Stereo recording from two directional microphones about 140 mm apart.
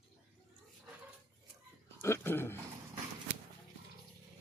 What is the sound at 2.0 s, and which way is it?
Dog, 20° left (ahead or behind).